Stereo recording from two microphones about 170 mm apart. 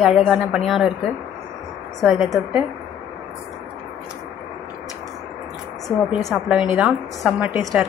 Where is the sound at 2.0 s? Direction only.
Centre (ahead or behind).